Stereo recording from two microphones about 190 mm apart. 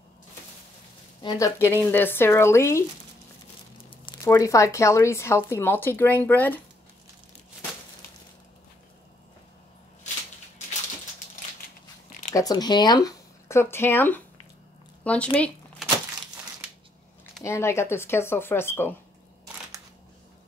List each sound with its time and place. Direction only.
1.2 s speech: 15° left (ahead or behind)
4.0 s speech: 20° left (ahead or behind)
12.1 s a sound: 40° left (ahead or behind)
12.4 s speech: 20° left (ahead or behind)
15.0 s a sound: 5° left (ahead or behind)
17.4 s speech: 15° left (ahead or behind)